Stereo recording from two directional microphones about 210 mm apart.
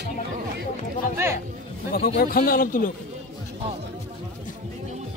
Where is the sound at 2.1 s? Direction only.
45° left (ahead or behind).